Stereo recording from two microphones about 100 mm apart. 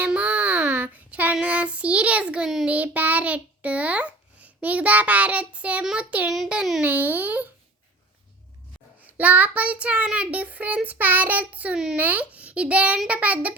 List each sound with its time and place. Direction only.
0.0 s a child's voice: 15° right (ahead or behind)
6.8 s a child's voice: 15° right (ahead or behind)
9.0 s a child's voice: 15° right (ahead or behind)